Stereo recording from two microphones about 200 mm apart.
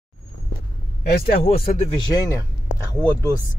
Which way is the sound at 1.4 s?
40° left (ahead or behind).